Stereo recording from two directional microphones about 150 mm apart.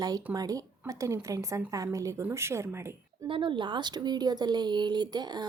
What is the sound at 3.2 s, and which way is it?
A woman's voice, 35° right (ahead or behind).